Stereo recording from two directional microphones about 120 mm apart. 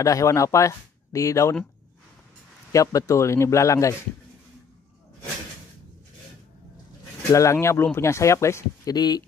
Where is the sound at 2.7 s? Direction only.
30° left (ahead or behind).